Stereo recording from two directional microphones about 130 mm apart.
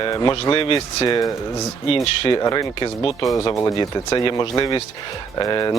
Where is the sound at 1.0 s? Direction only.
25° left (ahead or behind).